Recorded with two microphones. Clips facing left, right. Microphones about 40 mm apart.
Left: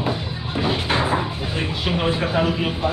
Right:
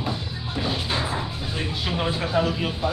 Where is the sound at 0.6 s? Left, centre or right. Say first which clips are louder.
Left 5 dB; left.